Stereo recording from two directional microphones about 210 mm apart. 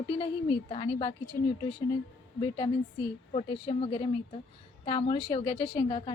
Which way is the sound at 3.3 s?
25° left (ahead or behind).